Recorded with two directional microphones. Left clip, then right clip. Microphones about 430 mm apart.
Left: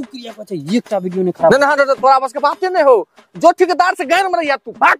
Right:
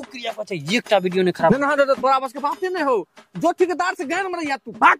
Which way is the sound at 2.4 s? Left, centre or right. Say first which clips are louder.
Left 9 dB; left.